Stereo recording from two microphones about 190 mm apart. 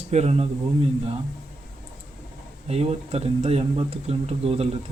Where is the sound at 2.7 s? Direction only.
35° right (ahead or behind).